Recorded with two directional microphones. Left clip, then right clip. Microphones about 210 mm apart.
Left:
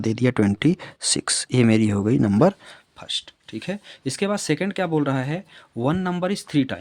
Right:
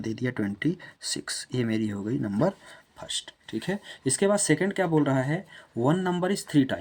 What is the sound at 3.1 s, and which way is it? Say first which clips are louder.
Speech: left 5 dB; 35° left (ahead or behind).